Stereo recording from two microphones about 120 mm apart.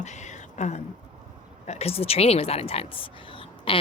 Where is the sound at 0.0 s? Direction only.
75° left (ahead or behind).